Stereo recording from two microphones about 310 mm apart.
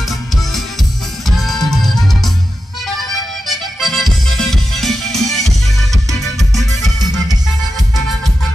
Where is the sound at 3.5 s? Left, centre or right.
Centre.